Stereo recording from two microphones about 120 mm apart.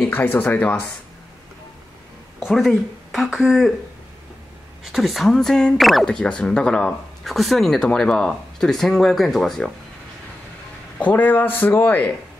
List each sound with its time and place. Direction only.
0.0 s speech: 15° left (ahead or behind)
2.4 s speech: centre (ahead or behind)
4.9 s speech: centre (ahead or behind)
11.0 s speech: 15° left (ahead or behind)